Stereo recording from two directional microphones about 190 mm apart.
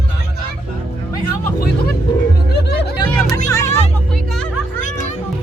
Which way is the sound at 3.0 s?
15° left (ahead or behind).